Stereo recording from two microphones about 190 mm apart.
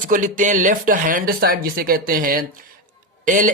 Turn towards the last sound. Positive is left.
turn(degrees=-45)  # may be behind; listen again after turning